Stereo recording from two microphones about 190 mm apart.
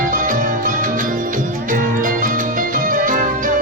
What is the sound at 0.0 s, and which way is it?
Music, 45° right (ahead or behind).